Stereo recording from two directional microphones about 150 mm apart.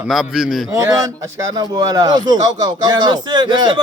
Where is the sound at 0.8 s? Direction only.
20° right (ahead or behind).